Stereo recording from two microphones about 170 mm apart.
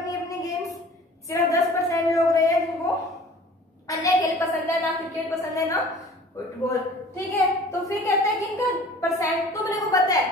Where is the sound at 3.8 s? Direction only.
20° left (ahead or behind).